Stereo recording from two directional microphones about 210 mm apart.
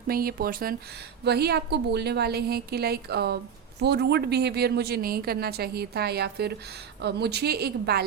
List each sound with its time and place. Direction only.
0.1 s a woman's voice: 45° right (ahead or behind)